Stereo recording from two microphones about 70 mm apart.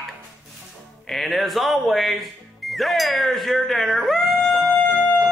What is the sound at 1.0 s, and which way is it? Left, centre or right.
Speech, centre.